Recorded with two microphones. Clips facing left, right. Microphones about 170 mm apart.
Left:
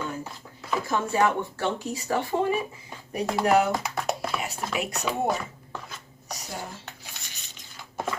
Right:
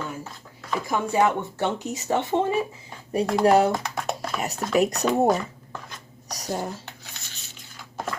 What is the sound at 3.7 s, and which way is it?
Speech, centre (ahead or behind).